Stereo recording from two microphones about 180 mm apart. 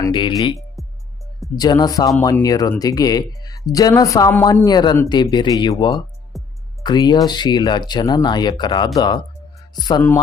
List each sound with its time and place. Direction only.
0.0 s speech: 25° left (ahead or behind)
0.8 s music: centre (ahead or behind)
1.5 s speech: 20° left (ahead or behind)
6.3 s music: centre (ahead or behind)
6.8 s speech: 25° left (ahead or behind)